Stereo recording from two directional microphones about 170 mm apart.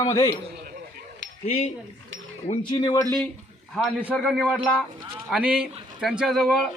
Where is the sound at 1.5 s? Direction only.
35° left (ahead or behind).